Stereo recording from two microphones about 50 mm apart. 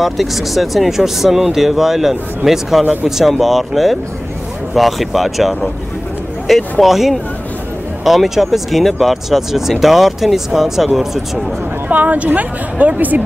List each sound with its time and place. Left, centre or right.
0.0 s speech: centre
2.8 s a woman's voice: right
3.1 s speech: centre
11.9 s a woman's voice: right